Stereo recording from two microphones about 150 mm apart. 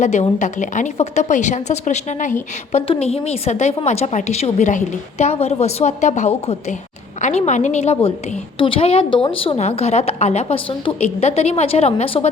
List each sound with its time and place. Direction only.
0.0 s a woman's voice: 50° left (ahead or behind)
2.7 s a woman's voice: 40° left (ahead or behind)
8.5 s a woman's voice: 35° left (ahead or behind)